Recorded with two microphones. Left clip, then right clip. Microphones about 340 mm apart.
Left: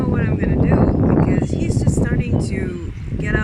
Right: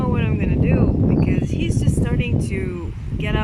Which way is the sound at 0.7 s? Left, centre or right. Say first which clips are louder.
Left 4 dB; left.